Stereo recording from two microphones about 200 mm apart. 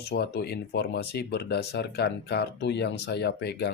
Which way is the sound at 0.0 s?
55° left (ahead or behind).